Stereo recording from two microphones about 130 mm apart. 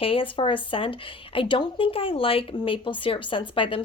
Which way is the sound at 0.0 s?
45° left (ahead or behind).